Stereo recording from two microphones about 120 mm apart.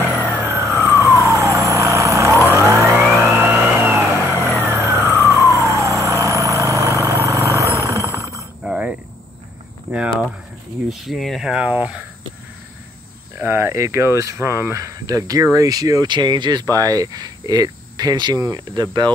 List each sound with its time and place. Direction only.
0.2 s vehicle: 20° right (ahead or behind)
2.5 s emergency vehicle: 25° right (ahead or behind)
3.2 s music: 20° right (ahead or behind)
4.6 s vehicle: 20° right (ahead or behind)
8.6 s cricket: 10° right (ahead or behind)
10.9 s a sound: centre (ahead or behind)
13.4 s speech: 20° right (ahead or behind)